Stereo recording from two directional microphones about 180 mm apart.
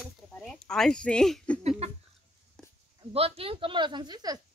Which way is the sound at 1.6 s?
35° right (ahead or behind).